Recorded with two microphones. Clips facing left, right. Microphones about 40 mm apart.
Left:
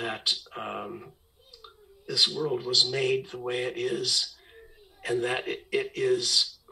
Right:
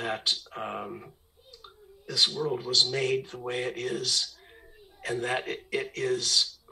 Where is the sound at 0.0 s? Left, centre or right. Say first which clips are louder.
Even; centre.